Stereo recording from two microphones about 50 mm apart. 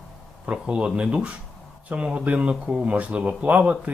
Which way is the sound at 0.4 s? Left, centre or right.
Right.